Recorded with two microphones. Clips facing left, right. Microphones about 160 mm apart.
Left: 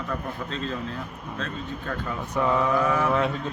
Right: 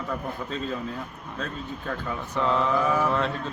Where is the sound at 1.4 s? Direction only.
5° right (ahead or behind).